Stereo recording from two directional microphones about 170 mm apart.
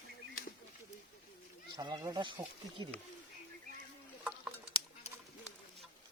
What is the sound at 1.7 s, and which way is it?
Speech, 20° right (ahead or behind).